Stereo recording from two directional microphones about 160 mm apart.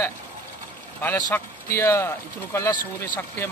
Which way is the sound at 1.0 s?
15° left (ahead or behind).